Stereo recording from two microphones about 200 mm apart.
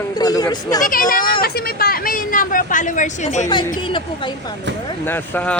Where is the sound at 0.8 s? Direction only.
40° left (ahead or behind).